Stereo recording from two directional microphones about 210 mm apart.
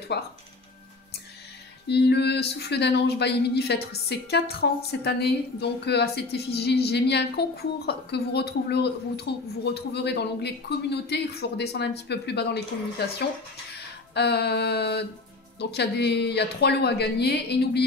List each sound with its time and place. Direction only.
0.1 s speech: 55° left (ahead or behind)
1.9 s speech: 55° left (ahead or behind)
13.7 s a sound: 50° left (ahead or behind)
15.6 s speech: 50° left (ahead or behind)